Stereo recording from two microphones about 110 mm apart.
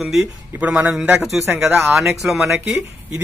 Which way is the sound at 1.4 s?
25° right (ahead or behind).